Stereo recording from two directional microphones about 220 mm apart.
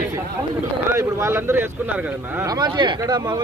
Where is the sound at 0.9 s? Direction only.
10° right (ahead or behind).